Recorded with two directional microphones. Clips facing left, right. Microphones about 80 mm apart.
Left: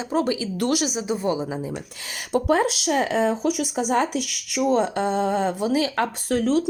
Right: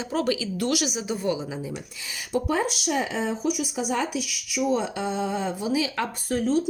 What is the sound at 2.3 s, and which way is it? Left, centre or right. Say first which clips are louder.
Speech: left 5 dB; left.